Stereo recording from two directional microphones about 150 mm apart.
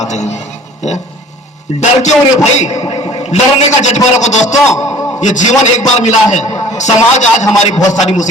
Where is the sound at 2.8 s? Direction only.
30° left (ahead or behind).